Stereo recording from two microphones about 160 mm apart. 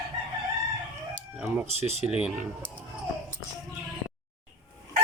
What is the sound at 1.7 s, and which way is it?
Speech, 40° right (ahead or behind).